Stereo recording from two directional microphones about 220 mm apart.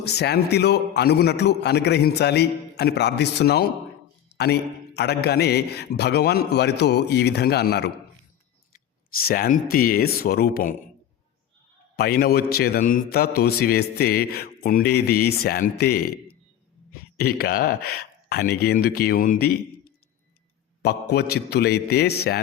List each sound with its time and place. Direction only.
0.0 s a man's voice: 50° left (ahead or behind)
9.2 s a man's voice: 40° left (ahead or behind)
11.9 s a man's voice: 45° left (ahead or behind)